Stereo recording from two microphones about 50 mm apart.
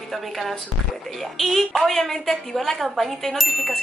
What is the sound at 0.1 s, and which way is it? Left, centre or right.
A woman's voice, centre.